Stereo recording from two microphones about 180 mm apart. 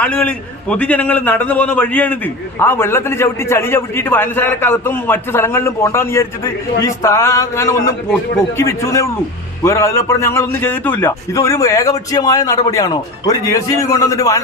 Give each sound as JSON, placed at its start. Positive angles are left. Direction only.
{"t": 0.0, "sound": "a man's voice", "side_deg": 10}